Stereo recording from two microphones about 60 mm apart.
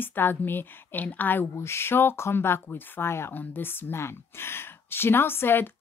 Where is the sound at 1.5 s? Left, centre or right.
Left.